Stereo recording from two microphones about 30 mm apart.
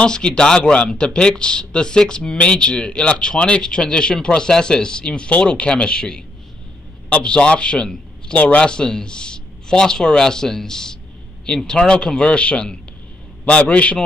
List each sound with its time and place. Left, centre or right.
0.0 s speech: left
7.2 s a man's voice: left